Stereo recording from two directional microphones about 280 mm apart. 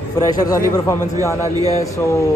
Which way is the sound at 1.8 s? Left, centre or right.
Centre.